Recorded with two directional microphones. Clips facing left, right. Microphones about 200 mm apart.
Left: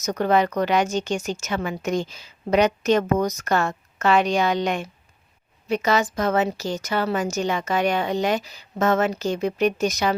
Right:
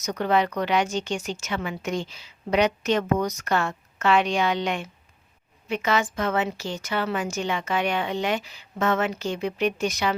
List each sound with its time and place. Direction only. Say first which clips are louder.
0.0 s a woman's voice: left 3 dB; 45° left (ahead or behind)